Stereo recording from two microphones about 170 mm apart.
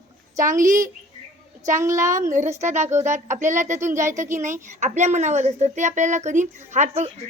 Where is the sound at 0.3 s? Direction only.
20° right (ahead or behind).